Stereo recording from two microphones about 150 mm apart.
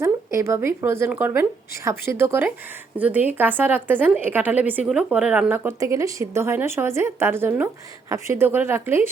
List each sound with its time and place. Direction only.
0.0 s speech: 20° right (ahead or behind)